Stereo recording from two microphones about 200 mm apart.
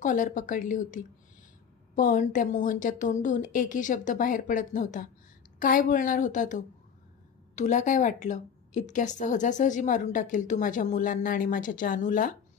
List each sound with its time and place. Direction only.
0.0 s a woman's voice: 40° left (ahead or behind)